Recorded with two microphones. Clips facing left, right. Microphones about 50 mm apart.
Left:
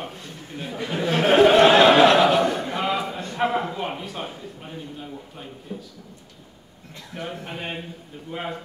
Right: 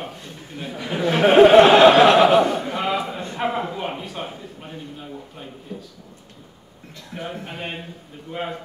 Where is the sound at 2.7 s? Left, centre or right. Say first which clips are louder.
Right 1 dB; centre.